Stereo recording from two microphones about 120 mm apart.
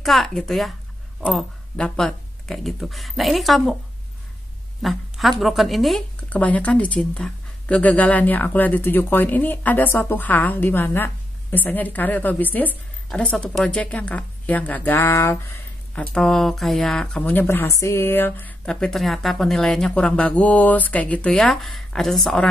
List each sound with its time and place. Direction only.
0.0 s a woman's voice: centre (ahead or behind)
4.8 s a woman's voice: centre (ahead or behind)
6.3 s a woman's voice: 10° left (ahead or behind)
17.3 s speech: 15° left (ahead or behind)
18.7 s a woman's voice: 5° left (ahead or behind)